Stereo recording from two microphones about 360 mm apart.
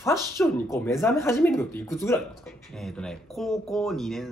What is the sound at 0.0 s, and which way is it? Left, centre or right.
A man's voice, centre.